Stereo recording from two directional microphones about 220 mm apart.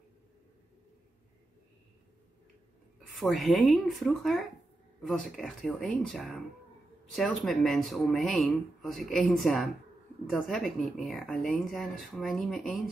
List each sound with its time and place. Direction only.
3.2 s speech: centre (ahead or behind)